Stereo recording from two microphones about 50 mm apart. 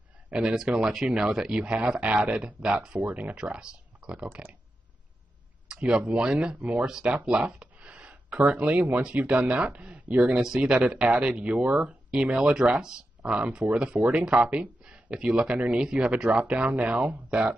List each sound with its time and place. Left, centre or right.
0.4 s speech: centre
1.6 s speech: right
3.0 s speech: right
3.3 s speech: centre
4.3 s speech: right
5.7 s speech: centre
6.5 s speech: right
6.9 s speech: centre
11.0 s speech: right
12.1 s speech: centre
14.9 s a sound: centre
15.2 s speech: centre